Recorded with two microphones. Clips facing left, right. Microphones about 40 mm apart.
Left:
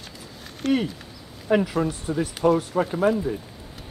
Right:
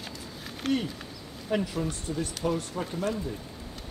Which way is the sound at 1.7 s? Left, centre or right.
Centre.